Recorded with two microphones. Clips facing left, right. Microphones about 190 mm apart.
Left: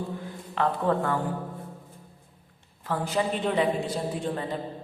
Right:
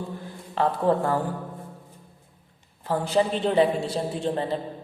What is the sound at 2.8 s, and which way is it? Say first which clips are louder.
A man's voice: right 4 dB; 30° right (ahead or behind).